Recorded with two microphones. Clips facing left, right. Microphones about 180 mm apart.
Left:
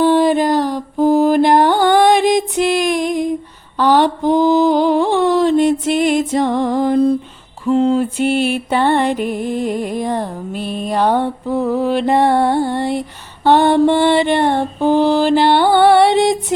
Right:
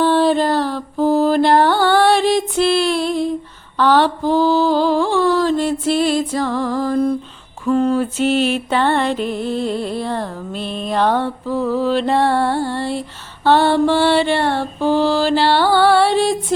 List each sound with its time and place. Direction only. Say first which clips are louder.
0.0 s mantra: left 2 dB; 15° left (ahead or behind)
5.9 s music: left 2 dB; 15° left (ahead or behind)